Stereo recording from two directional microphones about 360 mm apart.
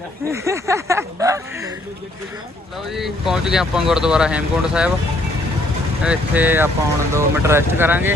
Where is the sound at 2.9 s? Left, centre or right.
Centre.